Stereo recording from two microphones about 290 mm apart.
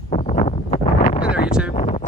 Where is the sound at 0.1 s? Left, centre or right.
Left.